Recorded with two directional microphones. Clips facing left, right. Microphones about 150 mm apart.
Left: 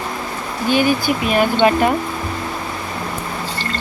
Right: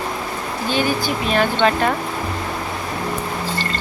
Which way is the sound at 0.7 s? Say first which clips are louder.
Left 5 dB; 10° left (ahead or behind).